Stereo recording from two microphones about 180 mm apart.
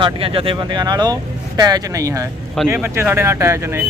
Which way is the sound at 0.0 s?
30° right (ahead or behind).